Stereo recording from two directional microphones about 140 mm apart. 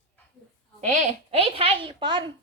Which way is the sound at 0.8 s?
60° right (ahead or behind).